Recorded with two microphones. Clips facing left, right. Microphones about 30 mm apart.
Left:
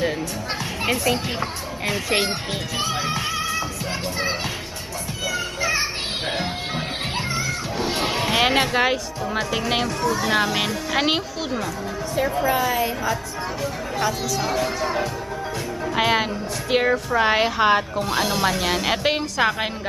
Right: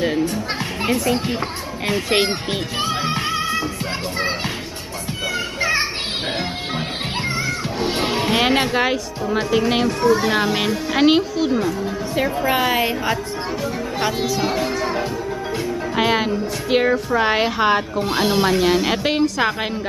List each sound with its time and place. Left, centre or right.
1.9 s speech: right
2.8 s music: right
5.6 s children playing: right
8.0 s speech: centre
9.8 s speech: centre
10.3 s a woman's voice: centre
12.4 s a woman's voice: right; by 18.0 s centre
18.0 s a woman's voice: centre